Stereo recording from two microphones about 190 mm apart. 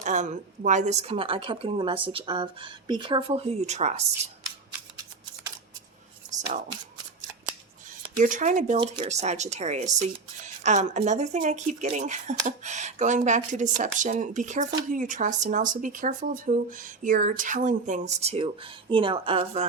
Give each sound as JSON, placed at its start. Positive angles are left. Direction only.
{"t": 0.0, "sound": "a woman's voice", "side_deg": -40}
{"t": 8.2, "sound": "speech", "side_deg": -40}
{"t": 8.8, "sound": "speech", "side_deg": -30}